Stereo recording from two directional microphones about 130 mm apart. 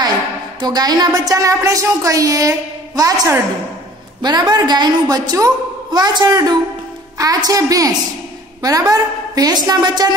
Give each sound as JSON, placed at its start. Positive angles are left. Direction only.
{"t": 0.6, "sound": "a woman's voice", "side_deg": -30}